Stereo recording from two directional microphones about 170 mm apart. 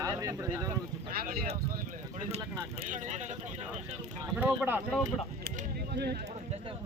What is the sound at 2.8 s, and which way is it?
Speech, 50° right (ahead or behind).